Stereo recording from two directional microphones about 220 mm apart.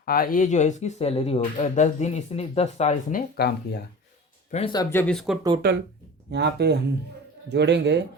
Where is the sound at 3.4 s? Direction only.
45° left (ahead or behind).